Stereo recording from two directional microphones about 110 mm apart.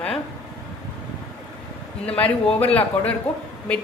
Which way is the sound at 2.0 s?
15° left (ahead or behind).